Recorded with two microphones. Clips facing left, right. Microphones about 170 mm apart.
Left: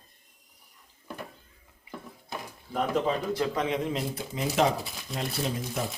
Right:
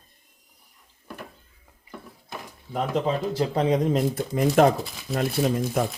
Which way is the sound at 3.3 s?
30° right (ahead or behind).